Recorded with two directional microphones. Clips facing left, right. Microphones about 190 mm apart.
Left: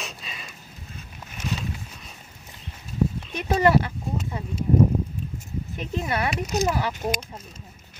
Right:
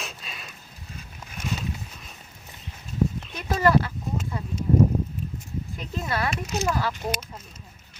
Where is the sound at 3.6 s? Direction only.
20° left (ahead or behind).